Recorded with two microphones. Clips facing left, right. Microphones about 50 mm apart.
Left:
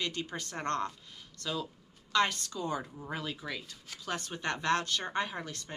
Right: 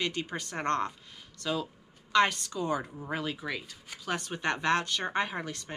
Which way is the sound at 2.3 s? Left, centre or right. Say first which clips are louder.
Right 4 dB; centre.